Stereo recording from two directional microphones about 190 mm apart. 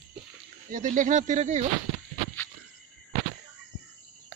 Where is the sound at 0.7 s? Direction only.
40° right (ahead or behind).